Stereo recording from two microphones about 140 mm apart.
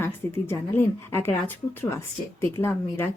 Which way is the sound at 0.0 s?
15° left (ahead or behind).